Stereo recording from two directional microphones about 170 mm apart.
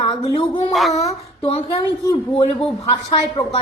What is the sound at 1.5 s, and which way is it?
A woman's voice, 30° left (ahead or behind).